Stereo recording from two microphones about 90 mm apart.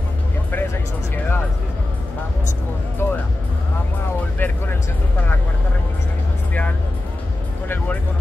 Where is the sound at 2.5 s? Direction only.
25° left (ahead or behind).